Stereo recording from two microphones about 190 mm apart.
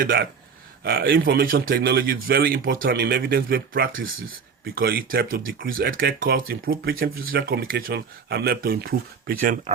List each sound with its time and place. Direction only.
0.0 s speech: 50° right (ahead or behind)